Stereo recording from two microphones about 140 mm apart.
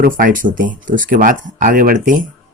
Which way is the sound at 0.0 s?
85° right.